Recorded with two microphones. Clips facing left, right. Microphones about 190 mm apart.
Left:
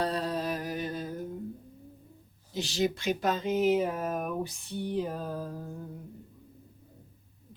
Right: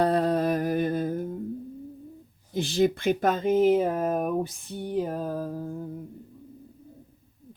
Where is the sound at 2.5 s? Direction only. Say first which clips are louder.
Right 6 dB; 55° right (ahead or behind).